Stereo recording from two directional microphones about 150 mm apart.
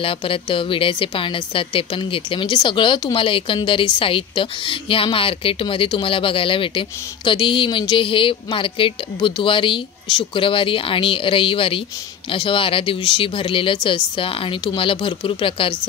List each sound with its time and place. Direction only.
0.0 s a woman's voice: 35° left (ahead or behind)